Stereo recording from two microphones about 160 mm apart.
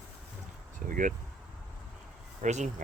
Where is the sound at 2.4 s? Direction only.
50° right (ahead or behind).